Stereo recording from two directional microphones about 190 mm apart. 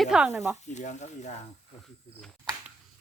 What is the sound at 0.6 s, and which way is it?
Speech, 40° left (ahead or behind).